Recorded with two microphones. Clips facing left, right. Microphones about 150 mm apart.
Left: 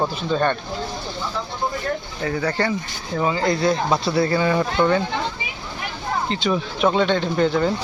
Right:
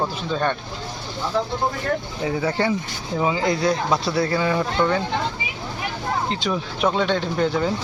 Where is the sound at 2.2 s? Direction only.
5° right (ahead or behind).